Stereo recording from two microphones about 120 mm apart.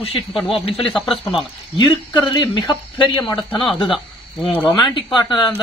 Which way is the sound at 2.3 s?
40° left (ahead or behind).